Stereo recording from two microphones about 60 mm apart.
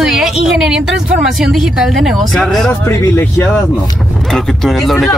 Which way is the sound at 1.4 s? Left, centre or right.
Centre.